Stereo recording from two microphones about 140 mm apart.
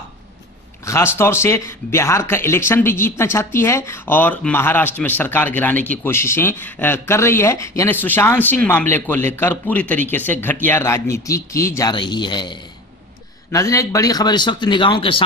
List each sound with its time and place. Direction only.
0.8 s speech: 20° left (ahead or behind)
11.9 s speech: 35° left (ahead or behind)